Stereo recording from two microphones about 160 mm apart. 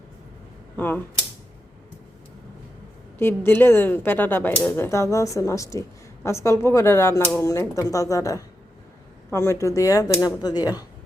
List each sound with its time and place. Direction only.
0.8 s speech: 10° left (ahead or behind)
3.2 s speech: 15° left (ahead or behind)